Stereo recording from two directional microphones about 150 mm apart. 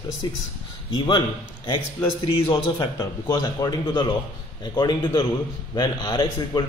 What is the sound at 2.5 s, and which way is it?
A man's voice, 25° left (ahead or behind).